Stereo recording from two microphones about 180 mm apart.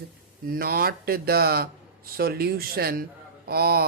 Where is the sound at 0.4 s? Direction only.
55° right (ahead or behind).